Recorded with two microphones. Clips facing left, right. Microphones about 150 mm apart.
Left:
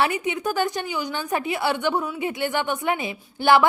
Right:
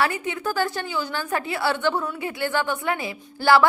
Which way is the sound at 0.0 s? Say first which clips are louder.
Left 1 dB; 20° left (ahead or behind).